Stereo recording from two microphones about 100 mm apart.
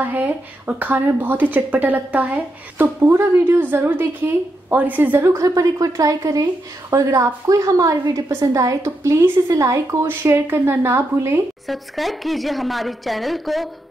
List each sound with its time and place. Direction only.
0.0 s a woman's voice: 15° right (ahead or behind)
5.5 s a woman's voice: 35° right (ahead or behind)
11.6 s speech: centre (ahead or behind)